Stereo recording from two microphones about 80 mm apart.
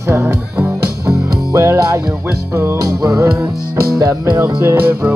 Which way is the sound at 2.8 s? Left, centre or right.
Right.